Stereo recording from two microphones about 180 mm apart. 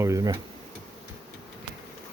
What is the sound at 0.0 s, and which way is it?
Speech, 15° right (ahead or behind).